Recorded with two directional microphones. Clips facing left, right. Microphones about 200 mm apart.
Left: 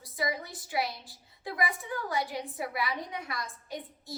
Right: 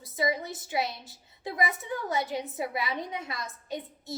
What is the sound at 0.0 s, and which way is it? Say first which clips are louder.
A woman's voice: right 4 dB; 25° right (ahead or behind).